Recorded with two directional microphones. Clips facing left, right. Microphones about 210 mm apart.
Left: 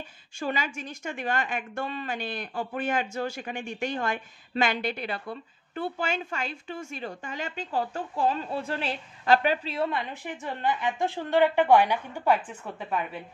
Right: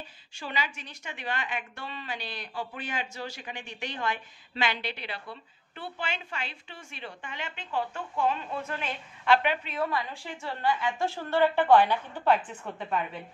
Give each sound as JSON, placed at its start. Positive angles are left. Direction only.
{"t": 0.4, "sound": "speech", "side_deg": 45}